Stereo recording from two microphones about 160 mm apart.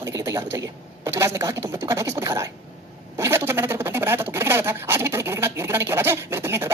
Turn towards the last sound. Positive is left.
turn(degrees=-15)  # may be behind; listen again after turning